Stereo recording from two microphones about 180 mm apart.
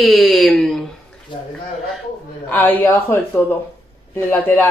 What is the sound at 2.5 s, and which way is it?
Speech, 10° left (ahead or behind).